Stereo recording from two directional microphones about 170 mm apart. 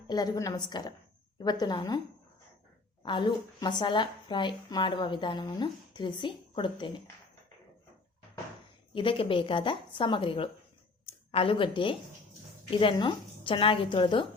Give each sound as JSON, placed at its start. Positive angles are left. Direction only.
{"t": 0.1, "sound": "a woman's voice", "side_deg": 25}
{"t": 3.0, "sound": "a woman's voice", "side_deg": 30}
{"t": 8.9, "sound": "a woman's voice", "side_deg": 30}